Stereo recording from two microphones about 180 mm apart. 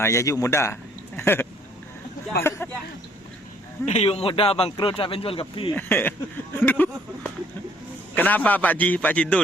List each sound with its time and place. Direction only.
0.0 s a man's voice: 15° left (ahead or behind)
3.8 s speech: 35° left (ahead or behind)
5.7 s a man's voice: 10° left (ahead or behind)
8.1 s a man's voice: 10° left (ahead or behind)